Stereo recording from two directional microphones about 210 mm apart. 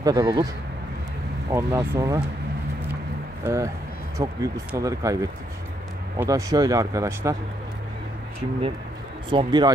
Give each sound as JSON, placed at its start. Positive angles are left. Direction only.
{"t": 0.0, "sound": "speech", "side_deg": -15}
{"t": 1.5, "sound": "speech", "side_deg": -10}
{"t": 3.4, "sound": "speech", "side_deg": -15}
{"t": 6.1, "sound": "speech", "side_deg": -15}
{"t": 9.3, "sound": "speech", "side_deg": -20}